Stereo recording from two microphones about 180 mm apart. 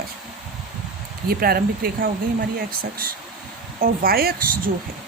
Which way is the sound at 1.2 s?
55° right (ahead or behind).